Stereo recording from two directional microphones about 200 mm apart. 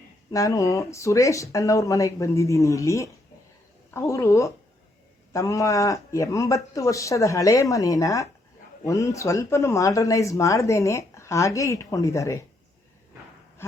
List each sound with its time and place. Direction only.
0.3 s speech: 15° left (ahead or behind)